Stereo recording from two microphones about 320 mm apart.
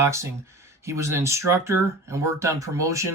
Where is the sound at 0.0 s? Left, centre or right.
Centre.